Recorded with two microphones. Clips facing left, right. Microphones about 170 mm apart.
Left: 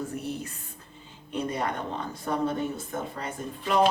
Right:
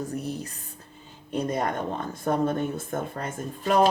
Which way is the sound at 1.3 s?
40° right (ahead or behind).